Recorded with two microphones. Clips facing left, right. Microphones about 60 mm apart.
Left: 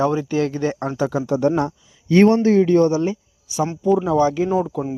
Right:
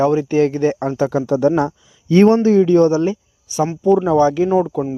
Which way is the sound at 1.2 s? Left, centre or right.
Right.